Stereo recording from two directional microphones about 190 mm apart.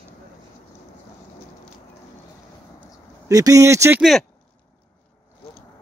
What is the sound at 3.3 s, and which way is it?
Speech, 15° right (ahead or behind).